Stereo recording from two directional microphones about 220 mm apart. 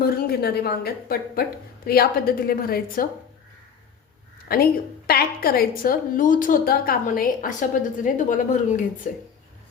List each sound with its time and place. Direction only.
0.0 s a woman's voice: 45° left (ahead or behind)
4.4 s a woman's voice: 45° left (ahead or behind)